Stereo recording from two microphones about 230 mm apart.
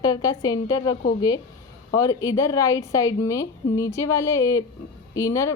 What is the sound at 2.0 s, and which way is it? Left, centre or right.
A woman's voice, centre.